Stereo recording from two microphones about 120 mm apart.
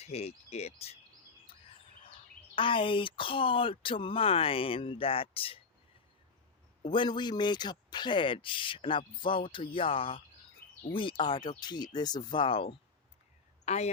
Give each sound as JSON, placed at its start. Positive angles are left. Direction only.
{"t": 0.0, "sound": "speech", "side_deg": 60}
{"t": 2.6, "sound": "speech", "side_deg": 45}
{"t": 6.8, "sound": "speech", "side_deg": 45}
{"t": 11.2, "sound": "speech", "side_deg": 40}
{"t": 13.7, "sound": "a man's voice", "side_deg": 65}